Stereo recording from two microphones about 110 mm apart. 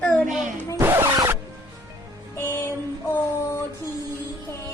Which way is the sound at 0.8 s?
25° right (ahead or behind).